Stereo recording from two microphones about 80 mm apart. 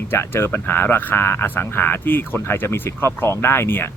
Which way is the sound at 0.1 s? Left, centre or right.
Left.